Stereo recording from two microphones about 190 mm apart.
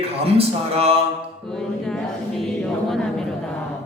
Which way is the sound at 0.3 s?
30° right (ahead or behind).